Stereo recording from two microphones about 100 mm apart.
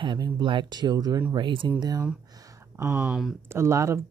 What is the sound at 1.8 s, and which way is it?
Speech, 40° right (ahead or behind).